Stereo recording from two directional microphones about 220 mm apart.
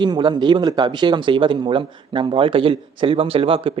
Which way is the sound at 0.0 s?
20° right (ahead or behind).